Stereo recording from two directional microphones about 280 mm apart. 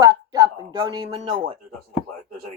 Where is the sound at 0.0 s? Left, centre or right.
Centre.